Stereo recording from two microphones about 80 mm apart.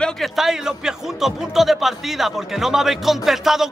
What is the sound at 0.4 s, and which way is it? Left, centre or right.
A man's voice, centre.